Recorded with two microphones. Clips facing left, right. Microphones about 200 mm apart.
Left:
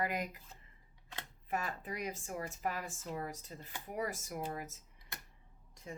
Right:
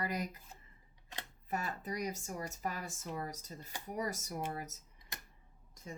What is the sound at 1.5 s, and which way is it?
Speech, 40° right (ahead or behind).